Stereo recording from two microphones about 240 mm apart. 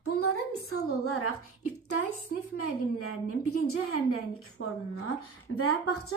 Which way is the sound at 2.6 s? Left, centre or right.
Left.